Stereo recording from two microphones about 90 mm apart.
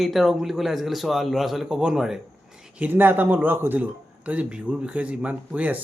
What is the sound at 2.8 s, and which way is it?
Speech, 20° right (ahead or behind).